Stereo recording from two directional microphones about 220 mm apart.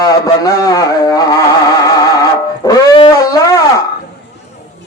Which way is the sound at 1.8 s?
15° left (ahead or behind).